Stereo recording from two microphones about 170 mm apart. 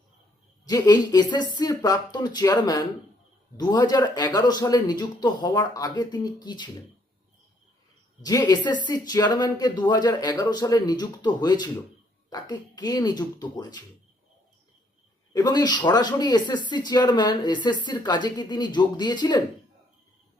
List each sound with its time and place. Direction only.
0.6 s speech: 25° left (ahead or behind)
8.2 s speech: 25° left (ahead or behind)
15.3 s speech: 25° left (ahead or behind)